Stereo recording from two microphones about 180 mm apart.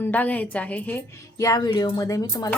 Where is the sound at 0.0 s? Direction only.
10° left (ahead or behind).